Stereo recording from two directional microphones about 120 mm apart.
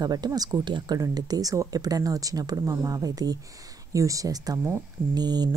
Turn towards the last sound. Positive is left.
turn(degrees=-35)  # may be behind; listen again after turning